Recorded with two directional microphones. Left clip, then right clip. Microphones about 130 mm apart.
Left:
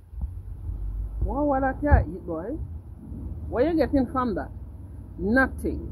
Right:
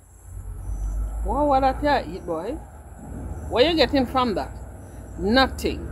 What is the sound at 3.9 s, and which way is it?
Speech, 10° right (ahead or behind).